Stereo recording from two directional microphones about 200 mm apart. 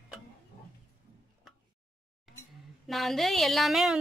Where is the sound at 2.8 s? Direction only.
Centre (ahead or behind).